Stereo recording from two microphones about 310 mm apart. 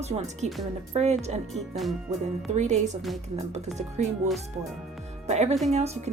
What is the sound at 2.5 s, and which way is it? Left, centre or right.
A woman's voice, right.